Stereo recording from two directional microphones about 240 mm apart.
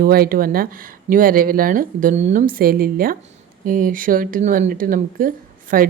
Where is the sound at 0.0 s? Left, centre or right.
Right.